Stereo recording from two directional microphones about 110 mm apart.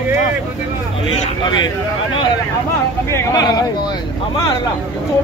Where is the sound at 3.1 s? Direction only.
25° left (ahead or behind).